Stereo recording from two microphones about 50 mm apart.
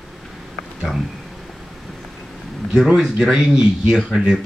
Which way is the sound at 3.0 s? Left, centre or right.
Centre.